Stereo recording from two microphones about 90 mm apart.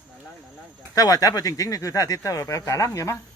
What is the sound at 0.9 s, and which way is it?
Speech, 40° left (ahead or behind).